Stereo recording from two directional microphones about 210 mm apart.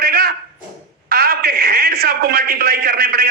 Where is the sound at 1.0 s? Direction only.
45° right (ahead or behind).